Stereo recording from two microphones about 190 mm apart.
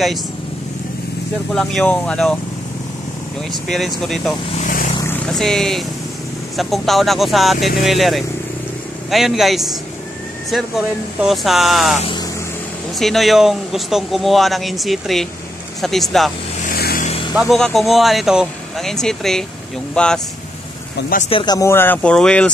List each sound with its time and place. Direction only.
1.5 s speech: centre (ahead or behind)
3.5 s speech: centre (ahead or behind)
4.6 s speech: 40° left (ahead or behind)
5.2 s speech: centre (ahead or behind)
11.1 s speech: centre (ahead or behind)
12.0 s speech: 25° left (ahead or behind)
13.0 s speech: centre (ahead or behind)
16.6 s vehicle: 50° left (ahead or behind)
17.3 s speech: centre (ahead or behind)
21.3 s speech: 25° left (ahead or behind); by 22.5 s 5° left (ahead or behind)